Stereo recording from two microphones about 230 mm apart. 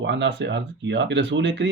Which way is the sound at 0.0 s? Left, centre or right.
Right.